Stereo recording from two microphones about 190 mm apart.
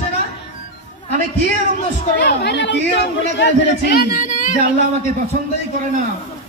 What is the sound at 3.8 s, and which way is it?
Speech, 50° left (ahead or behind).